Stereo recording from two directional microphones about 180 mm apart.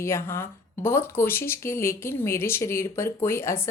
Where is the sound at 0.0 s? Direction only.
15° left (ahead or behind).